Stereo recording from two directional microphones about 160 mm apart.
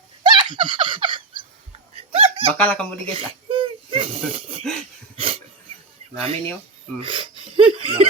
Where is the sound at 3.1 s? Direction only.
35° right (ahead or behind).